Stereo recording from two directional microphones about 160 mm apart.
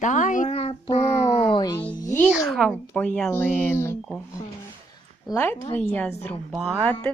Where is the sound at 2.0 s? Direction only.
20° left (ahead or behind).